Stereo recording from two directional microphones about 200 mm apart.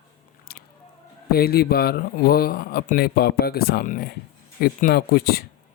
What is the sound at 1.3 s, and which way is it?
Speech, 50° left (ahead or behind).